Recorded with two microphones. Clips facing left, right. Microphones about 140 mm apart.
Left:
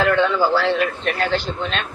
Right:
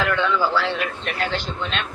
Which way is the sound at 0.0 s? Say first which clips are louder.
Left 4 dB; 40° left (ahead or behind).